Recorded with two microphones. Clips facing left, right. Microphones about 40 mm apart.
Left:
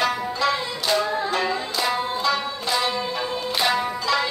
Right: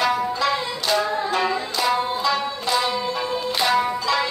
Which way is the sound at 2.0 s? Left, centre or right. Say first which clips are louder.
Right 1 dB; right.